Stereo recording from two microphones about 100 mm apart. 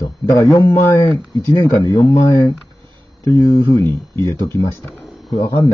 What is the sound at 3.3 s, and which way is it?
Speech, 25° left (ahead or behind).